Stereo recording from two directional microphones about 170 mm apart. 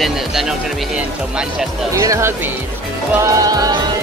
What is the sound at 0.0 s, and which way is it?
Speech, centre (ahead or behind).